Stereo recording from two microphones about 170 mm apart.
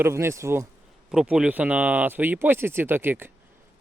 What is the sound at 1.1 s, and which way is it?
Speech, 5° right (ahead or behind).